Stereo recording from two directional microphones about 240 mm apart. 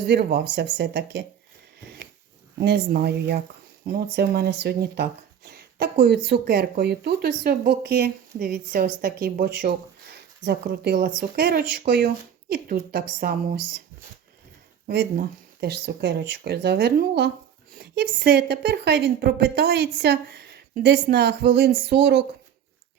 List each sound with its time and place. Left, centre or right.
0.0 s a woman's voice: right
2.6 s a woman's voice: right
14.8 s a woman's voice: right